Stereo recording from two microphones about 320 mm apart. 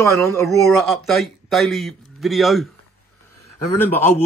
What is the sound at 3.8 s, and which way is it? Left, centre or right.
Speech, centre.